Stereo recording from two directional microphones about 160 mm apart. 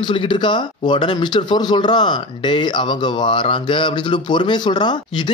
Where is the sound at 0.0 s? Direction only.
30° left (ahead or behind).